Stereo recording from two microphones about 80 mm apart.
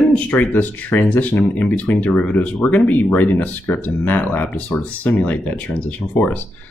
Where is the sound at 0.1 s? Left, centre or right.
Left.